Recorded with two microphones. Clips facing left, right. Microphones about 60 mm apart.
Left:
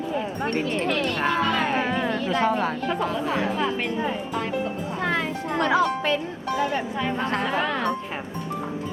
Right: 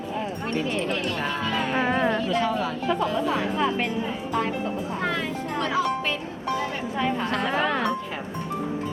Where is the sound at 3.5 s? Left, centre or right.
Centre.